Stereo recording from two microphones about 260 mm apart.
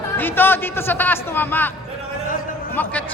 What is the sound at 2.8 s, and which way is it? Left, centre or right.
Speech, centre.